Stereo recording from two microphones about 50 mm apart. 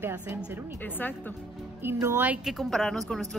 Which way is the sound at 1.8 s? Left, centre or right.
Right.